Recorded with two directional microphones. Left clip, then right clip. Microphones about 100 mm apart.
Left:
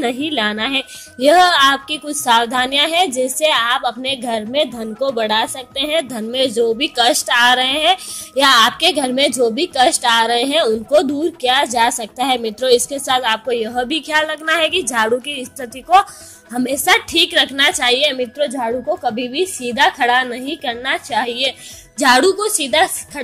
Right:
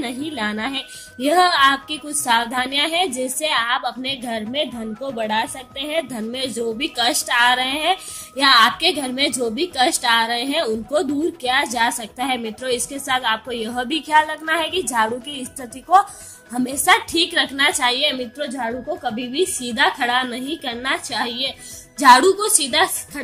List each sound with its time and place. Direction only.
0.0 s a woman's voice: 45° left (ahead or behind); by 13.4 s 65° left (ahead or behind)
13.5 s a woman's voice: 45° left (ahead or behind)
19.1 s a woman's voice: 40° left (ahead or behind)